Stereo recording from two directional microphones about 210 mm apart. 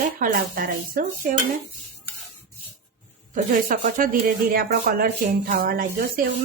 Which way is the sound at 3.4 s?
40° right (ahead or behind).